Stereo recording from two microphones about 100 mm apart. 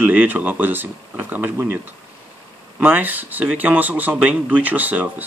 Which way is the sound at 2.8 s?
20° right (ahead or behind).